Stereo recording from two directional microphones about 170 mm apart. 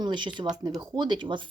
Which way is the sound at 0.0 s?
25° right (ahead or behind).